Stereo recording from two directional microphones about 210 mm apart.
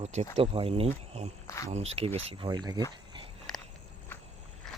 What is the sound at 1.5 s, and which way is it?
Speech, 15° left (ahead or behind).